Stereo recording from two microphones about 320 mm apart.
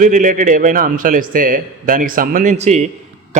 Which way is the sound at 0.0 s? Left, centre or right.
Right.